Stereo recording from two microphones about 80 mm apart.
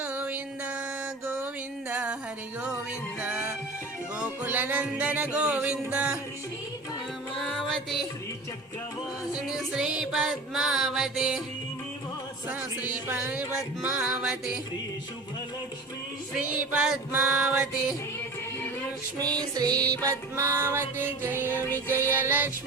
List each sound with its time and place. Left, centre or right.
0.0 s music: centre
1.9 s music: centre
3.2 s music: centre
7.3 s music: centre
9.3 s music: centre
12.9 s music: centre
16.3 s music: centre
17.4 s music: centre
19.2 s music: right
21.5 s music: left
22.2 s music: right